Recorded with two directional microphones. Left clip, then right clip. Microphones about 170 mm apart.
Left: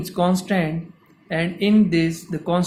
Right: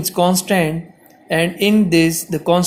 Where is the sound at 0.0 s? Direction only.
25° right (ahead or behind).